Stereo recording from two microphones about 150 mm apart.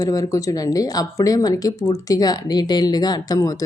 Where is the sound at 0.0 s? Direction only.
25° left (ahead or behind).